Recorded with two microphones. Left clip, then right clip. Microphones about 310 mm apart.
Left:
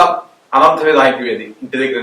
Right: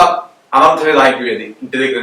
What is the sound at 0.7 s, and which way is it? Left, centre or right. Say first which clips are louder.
A man's voice: right 1 dB; centre.